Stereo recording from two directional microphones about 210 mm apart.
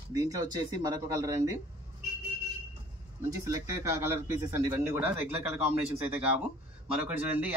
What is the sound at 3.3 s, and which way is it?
Speech, 15° right (ahead or behind).